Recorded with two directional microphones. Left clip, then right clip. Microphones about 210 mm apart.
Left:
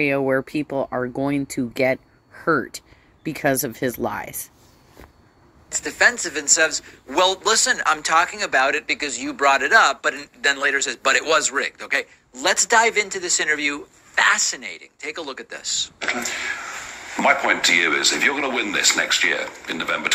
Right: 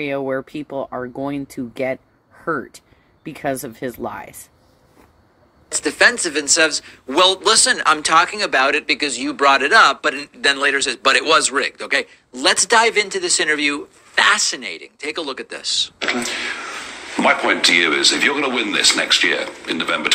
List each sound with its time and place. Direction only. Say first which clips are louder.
0.1 s speech: left 2 dB; 40° left (ahead or behind)
5.7 s a man's voice: right 3 dB; 5° right (ahead or behind)